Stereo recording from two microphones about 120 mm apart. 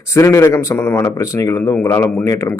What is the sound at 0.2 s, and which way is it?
Speech, 25° left (ahead or behind).